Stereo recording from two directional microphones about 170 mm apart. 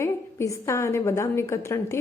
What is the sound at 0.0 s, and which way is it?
A woman's voice, 15° left (ahead or behind).